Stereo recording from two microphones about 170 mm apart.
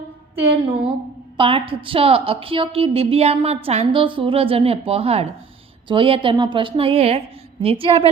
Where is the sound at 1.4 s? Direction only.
30° right (ahead or behind).